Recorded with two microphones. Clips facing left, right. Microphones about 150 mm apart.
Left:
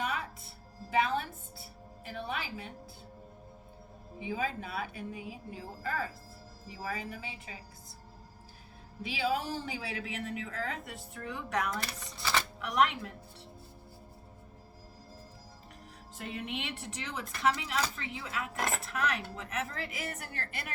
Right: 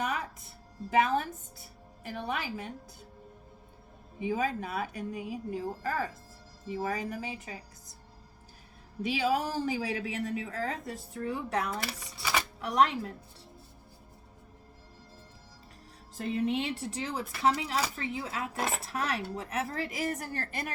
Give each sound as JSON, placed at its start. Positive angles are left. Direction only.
{"t": 0.9, "sound": "a woman's voice", "side_deg": -45}
{"t": 4.3, "sound": "a woman's voice", "side_deg": -45}
{"t": 9.0, "sound": "a woman's voice", "side_deg": -45}
{"t": 11.7, "sound": "a sound", "side_deg": -10}
{"t": 12.5, "sound": "speech", "side_deg": -35}
{"t": 16.1, "sound": "a woman's voice", "side_deg": -35}